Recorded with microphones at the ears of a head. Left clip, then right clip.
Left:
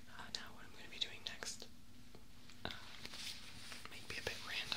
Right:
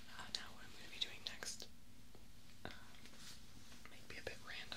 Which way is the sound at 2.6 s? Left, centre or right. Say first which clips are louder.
Left 7 dB; left.